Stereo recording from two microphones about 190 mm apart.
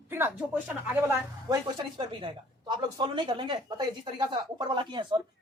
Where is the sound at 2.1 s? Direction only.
25° right (ahead or behind).